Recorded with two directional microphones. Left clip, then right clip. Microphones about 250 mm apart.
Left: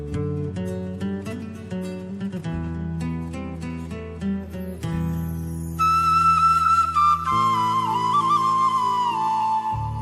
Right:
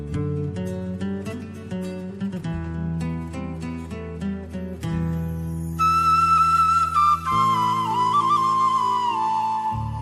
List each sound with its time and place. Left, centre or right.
0.2 s music: centre
4.9 s music: centre
5.8 s flute: centre